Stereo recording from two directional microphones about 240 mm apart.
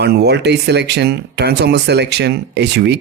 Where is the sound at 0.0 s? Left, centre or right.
Right.